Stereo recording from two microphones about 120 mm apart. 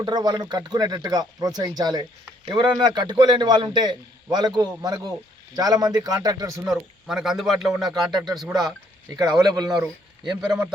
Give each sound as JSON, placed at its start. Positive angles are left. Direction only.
{"t": 0.0, "sound": "a man's voice", "side_deg": -35}
{"t": 6.7, "sound": "a man's voice", "side_deg": 0}
{"t": 8.1, "sound": "a man's voice", "side_deg": -35}
{"t": 10.4, "sound": "a man's voice", "side_deg": -5}